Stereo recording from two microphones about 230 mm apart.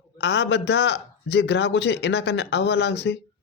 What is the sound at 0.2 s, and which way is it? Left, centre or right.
A man's voice, left.